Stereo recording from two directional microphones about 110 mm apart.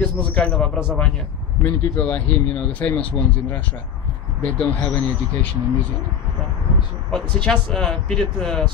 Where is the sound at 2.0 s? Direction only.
15° left (ahead or behind).